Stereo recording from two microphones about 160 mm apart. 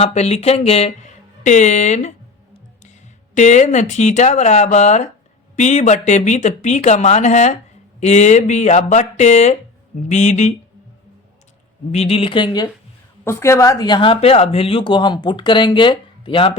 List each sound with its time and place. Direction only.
0.0 s speech: 40° left (ahead or behind)
3.3 s speech: 45° left (ahead or behind)
11.9 s speech: 40° left (ahead or behind)
13.2 s speech: 15° left (ahead or behind); by 16.6 s 35° left (ahead or behind)